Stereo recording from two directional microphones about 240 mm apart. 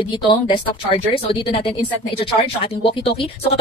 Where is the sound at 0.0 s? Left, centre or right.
Centre.